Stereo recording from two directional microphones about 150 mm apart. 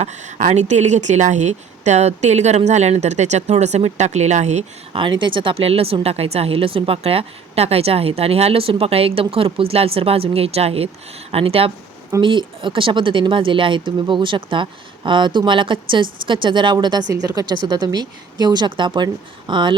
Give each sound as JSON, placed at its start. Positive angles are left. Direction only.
{"t": 0.0, "sound": "speech", "side_deg": -50}
{"t": 4.9, "sound": "speech", "side_deg": -35}